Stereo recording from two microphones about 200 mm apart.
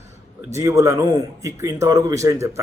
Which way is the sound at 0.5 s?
15° right (ahead or behind).